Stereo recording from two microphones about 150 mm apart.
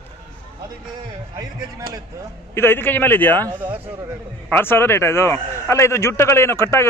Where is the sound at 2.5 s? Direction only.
15° left (ahead or behind).